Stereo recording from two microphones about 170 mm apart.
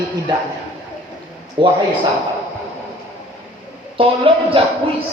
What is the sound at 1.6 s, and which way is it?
Speech, 30° right (ahead or behind).